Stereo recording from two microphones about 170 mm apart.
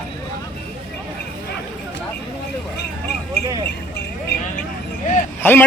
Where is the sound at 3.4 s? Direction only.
25° right (ahead or behind).